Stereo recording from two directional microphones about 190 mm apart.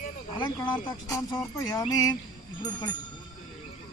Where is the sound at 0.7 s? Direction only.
20° left (ahead or behind).